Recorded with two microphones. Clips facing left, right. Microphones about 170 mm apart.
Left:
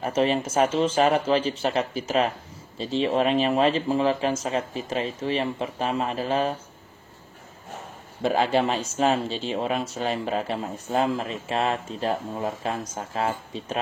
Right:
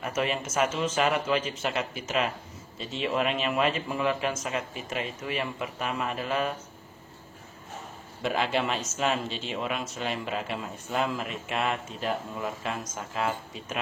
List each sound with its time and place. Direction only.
0.0 s speech: 30° left (ahead or behind)
8.2 s speech: 35° left (ahead or behind)